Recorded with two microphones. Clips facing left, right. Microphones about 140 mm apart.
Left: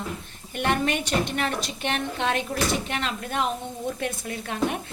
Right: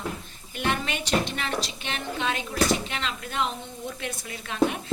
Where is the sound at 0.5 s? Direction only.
50° left (ahead or behind).